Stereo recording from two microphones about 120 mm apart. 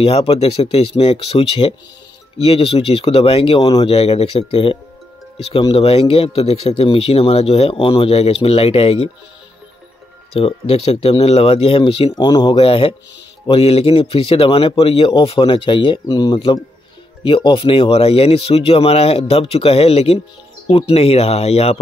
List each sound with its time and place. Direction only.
0.0 s speech: 55° left (ahead or behind)
10.3 s speech: 55° left (ahead or behind)
12.1 s speech: 35° left (ahead or behind)
12.5 s speech: 50° left (ahead or behind)